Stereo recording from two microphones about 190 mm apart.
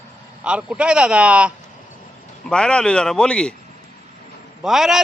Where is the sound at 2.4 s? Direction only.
5° left (ahead or behind).